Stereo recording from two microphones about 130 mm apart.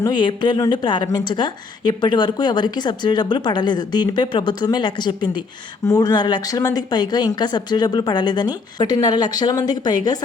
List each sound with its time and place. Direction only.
0.0 s a woman's voice: 35° left (ahead or behind)